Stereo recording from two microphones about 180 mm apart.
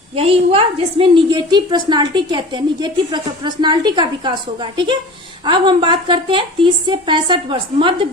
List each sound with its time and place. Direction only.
0.2 s a woman's voice: 30° right (ahead or behind)